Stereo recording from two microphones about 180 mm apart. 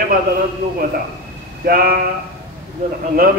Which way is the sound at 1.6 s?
55° right (ahead or behind).